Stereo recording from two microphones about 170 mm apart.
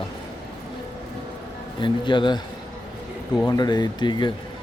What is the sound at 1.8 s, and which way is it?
Speech, 30° left (ahead or behind).